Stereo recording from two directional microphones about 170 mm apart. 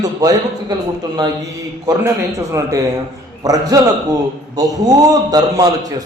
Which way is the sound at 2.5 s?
20° right (ahead or behind).